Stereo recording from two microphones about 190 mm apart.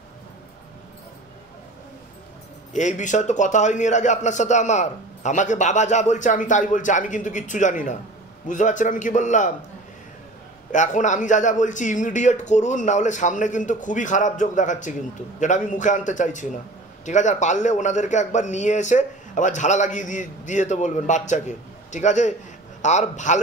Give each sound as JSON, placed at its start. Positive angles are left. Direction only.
{"t": 2.7, "sound": "a man's voice", "side_deg": 40}
{"t": 10.7, "sound": "a man's voice", "side_deg": 40}